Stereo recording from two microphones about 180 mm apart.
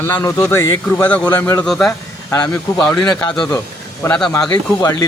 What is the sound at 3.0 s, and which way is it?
Speech, 20° left (ahead or behind).